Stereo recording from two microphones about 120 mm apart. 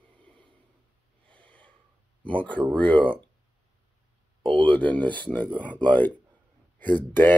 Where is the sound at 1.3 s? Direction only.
10° left (ahead or behind).